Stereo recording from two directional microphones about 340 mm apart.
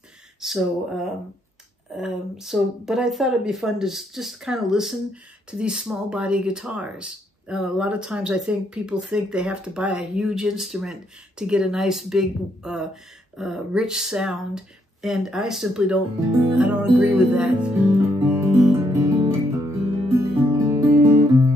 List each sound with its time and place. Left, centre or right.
0.4 s speech: centre
2.0 s speech: centre